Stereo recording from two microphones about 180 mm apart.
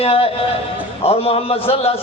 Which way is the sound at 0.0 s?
30° left (ahead or behind).